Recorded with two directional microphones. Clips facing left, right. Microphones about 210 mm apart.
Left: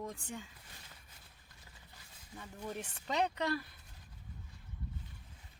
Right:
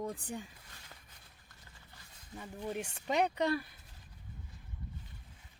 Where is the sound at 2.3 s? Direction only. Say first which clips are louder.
Right 4 dB; 15° right (ahead or behind).